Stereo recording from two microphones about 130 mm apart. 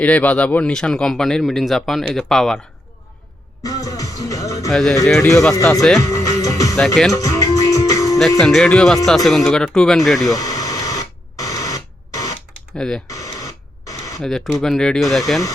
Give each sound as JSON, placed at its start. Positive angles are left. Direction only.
{"t": 0.0, "sound": "speech", "side_deg": 10}
{"t": 3.6, "sound": "music", "side_deg": 25}
{"t": 4.7, "sound": "speech", "side_deg": 0}
{"t": 5.5, "sound": "speech", "side_deg": 25}
{"t": 6.0, "sound": "music", "side_deg": 25}
{"t": 6.7, "sound": "speech", "side_deg": 0}
{"t": 7.1, "sound": "music", "side_deg": 25}
{"t": 8.4, "sound": "speech", "side_deg": 5}
{"t": 10.2, "sound": "radio", "side_deg": 30}
{"t": 12.7, "sound": "speech", "side_deg": 5}
{"t": 13.1, "sound": "radio", "side_deg": 25}
{"t": 14.2, "sound": "speech", "side_deg": 0}